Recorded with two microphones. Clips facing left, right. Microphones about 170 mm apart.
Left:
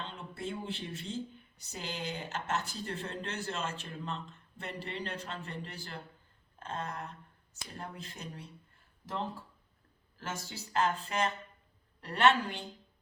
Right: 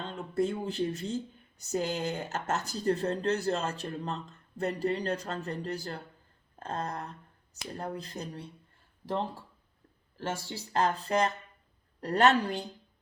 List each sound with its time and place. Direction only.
0.0 s speech: 45° right (ahead or behind)
10.2 s speech: 30° right (ahead or behind)